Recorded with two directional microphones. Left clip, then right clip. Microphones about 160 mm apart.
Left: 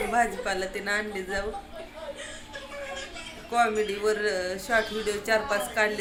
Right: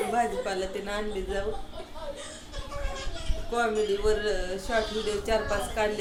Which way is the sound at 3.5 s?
20° left (ahead or behind).